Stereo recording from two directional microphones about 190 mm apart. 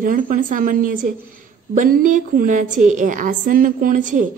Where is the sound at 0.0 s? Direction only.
45° right (ahead or behind).